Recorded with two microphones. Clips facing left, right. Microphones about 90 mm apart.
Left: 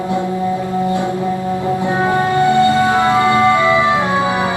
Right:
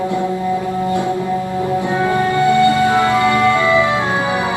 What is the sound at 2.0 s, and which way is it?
Music, 25° left (ahead or behind).